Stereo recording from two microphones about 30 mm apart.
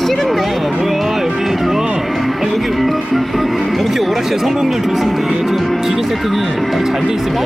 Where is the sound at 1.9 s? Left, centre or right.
Centre.